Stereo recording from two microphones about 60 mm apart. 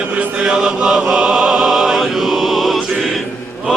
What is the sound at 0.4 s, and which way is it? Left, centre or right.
Music, centre.